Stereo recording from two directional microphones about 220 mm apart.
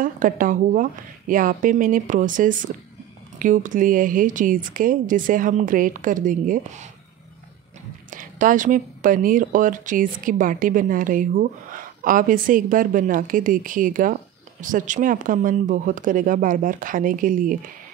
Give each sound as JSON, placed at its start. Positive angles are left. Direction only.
{"t": 0.0, "sound": "speech", "side_deg": -35}
{"t": 8.1, "sound": "speech", "side_deg": -35}